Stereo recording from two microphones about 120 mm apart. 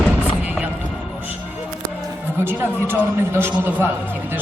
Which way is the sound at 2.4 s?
20° right (ahead or behind).